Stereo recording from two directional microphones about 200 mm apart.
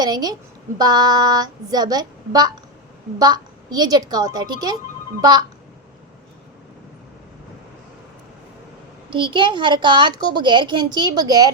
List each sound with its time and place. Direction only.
0.0 s a child's voice: 20° right (ahead or behind)
9.0 s a child's voice: 25° right (ahead or behind)